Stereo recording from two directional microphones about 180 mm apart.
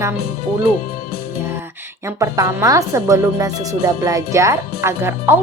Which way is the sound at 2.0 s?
15° right (ahead or behind).